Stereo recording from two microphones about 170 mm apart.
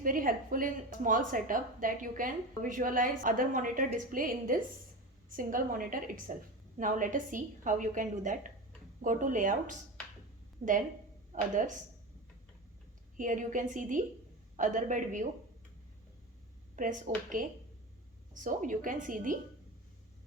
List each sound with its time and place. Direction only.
0.0 s a woman's voice: 55° right (ahead or behind)
10.6 s a woman's voice: 40° right (ahead or behind)
13.1 s a woman's voice: 50° right (ahead or behind)
16.7 s a woman's voice: 50° right (ahead or behind)
18.4 s a woman's voice: 50° right (ahead or behind)